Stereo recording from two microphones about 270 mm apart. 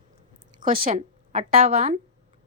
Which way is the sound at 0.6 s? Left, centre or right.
Right.